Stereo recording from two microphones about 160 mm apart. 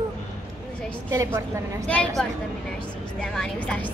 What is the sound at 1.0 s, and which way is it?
Speech, 15° right (ahead or behind).